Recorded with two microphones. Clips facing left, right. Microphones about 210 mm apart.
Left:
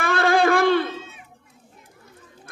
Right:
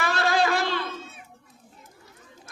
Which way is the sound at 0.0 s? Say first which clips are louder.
Left 5 dB; 55° left (ahead or behind).